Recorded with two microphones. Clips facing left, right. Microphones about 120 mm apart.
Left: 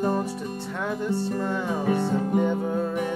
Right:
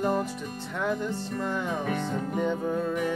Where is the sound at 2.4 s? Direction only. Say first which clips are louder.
Left 3 dB; 15° left (ahead or behind).